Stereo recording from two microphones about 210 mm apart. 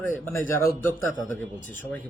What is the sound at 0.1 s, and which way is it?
Speech, 10° left (ahead or behind).